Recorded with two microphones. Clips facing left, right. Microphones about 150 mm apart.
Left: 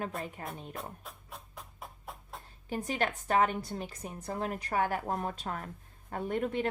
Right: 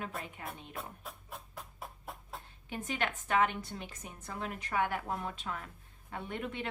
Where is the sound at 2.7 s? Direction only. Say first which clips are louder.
Left 4 dB; 40° left (ahead or behind).